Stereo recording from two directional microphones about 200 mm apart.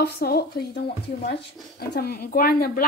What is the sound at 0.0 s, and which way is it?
Speech, 50° left (ahead or behind).